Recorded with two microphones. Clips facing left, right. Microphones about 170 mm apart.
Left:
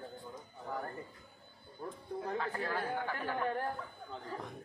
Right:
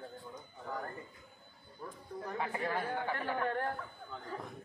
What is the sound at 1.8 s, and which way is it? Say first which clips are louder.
Speech: left 3 dB; 25° left (ahead or behind).